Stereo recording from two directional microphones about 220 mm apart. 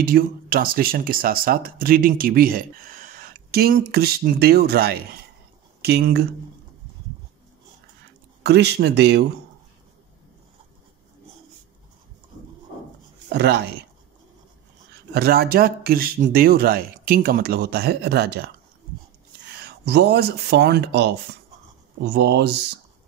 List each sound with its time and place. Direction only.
0.0 s speech: 40° right (ahead or behind)
8.5 s speech: 50° right (ahead or behind)
13.3 s speech: 50° right (ahead or behind)
15.1 s speech: 45° right (ahead or behind)
19.6 s speech: 45° right (ahead or behind)